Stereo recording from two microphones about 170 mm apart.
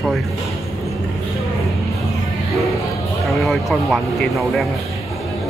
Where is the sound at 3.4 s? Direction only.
Centre (ahead or behind).